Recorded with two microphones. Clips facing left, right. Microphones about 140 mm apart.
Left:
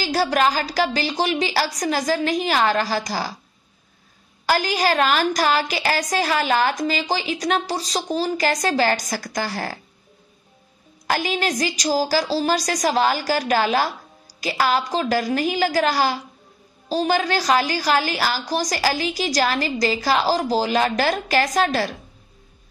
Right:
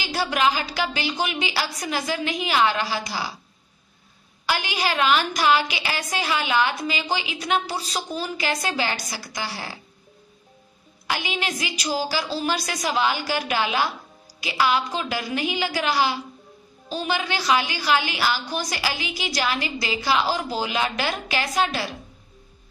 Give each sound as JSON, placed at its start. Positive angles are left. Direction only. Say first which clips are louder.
{"t": 0.0, "sound": "a woman's voice", "louder": "left 3 dB", "side_deg": 40}
{"t": 4.5, "sound": "a woman's voice", "louder": "left 5 dB", "side_deg": 40}
{"t": 11.1, "sound": "a woman's voice", "louder": "left 5 dB", "side_deg": 45}